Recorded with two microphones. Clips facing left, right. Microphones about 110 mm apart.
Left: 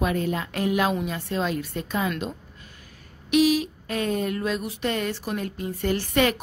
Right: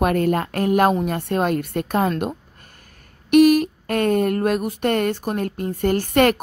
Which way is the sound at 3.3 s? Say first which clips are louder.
Right 7 dB; 55° right (ahead or behind).